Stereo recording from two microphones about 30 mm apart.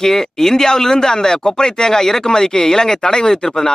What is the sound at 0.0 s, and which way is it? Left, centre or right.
Speech, centre.